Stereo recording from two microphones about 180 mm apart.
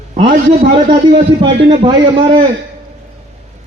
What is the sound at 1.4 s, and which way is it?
A man's voice, 30° right (ahead or behind).